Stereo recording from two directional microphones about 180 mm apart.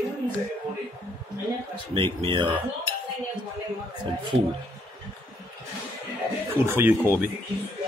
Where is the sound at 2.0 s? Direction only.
30° right (ahead or behind).